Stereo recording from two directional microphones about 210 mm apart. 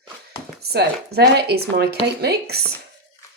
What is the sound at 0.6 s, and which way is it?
Speech, 50° right (ahead or behind).